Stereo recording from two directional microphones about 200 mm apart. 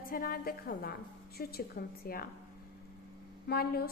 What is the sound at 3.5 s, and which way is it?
Speech, 50° left (ahead or behind).